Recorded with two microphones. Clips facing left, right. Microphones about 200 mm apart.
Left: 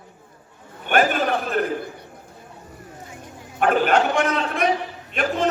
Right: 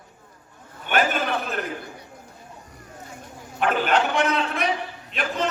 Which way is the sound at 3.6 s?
45° left (ahead or behind).